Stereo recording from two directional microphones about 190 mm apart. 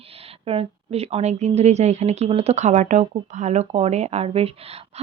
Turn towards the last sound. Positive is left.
turn(degrees=-30)  # may be behind; listen again after turning